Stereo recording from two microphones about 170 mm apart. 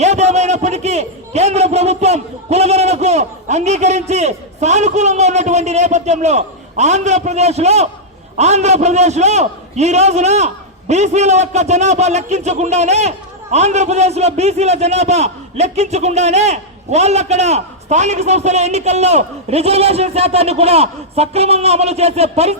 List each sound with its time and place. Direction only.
0.0 s a man's voice: 40° right (ahead or behind)